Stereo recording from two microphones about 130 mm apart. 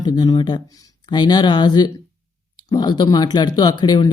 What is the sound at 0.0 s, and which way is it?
Speech, 30° left (ahead or behind).